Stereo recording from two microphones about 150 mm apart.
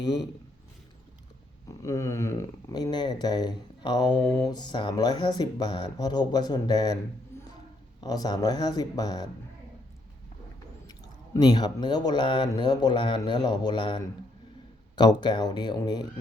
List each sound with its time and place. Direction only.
0.0 s speech: 30° left (ahead or behind)
1.6 s speech: 20° left (ahead or behind)
7.3 s a sound: 15° left (ahead or behind)
8.0 s speech: 25° left (ahead or behind)
10.8 s speech: 30° left (ahead or behind)